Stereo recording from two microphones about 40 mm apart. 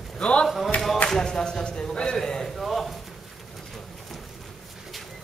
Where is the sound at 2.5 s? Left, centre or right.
Centre.